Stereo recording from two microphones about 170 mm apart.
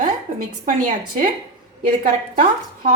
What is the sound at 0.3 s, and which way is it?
Speech, 55° right (ahead or behind).